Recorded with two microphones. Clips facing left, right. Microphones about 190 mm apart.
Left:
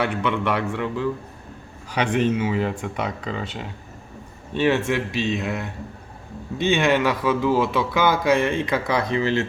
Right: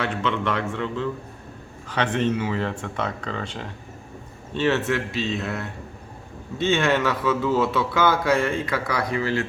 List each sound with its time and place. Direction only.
0.0 s a man's voice: 15° left (ahead or behind)
2.1 s a man's voice: 5° left (ahead or behind); by 9.5 s 20° left (ahead or behind)